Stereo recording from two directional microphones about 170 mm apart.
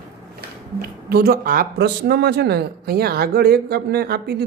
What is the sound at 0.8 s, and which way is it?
Speech, 65° right (ahead or behind).